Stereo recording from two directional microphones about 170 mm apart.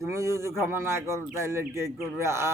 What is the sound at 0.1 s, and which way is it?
A man's voice, 15° right (ahead or behind).